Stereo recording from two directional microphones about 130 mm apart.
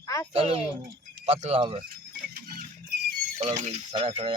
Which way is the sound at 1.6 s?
40° right (ahead or behind).